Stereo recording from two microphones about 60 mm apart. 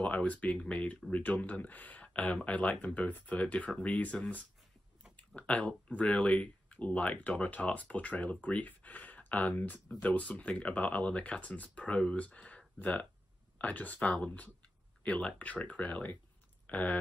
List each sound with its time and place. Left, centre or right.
0.0 s speech: left